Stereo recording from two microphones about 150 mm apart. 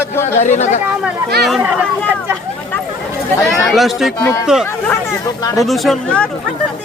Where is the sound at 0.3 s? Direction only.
50° left (ahead or behind).